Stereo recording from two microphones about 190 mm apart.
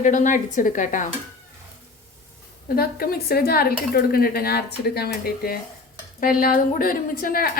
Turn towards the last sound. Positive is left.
turn(degrees=50)  # may be behind; listen again after turning